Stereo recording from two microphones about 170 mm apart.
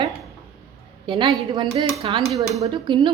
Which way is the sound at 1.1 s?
30° right (ahead or behind).